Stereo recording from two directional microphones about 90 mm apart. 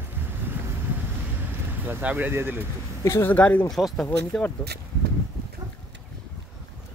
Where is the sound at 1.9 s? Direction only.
20° right (ahead or behind).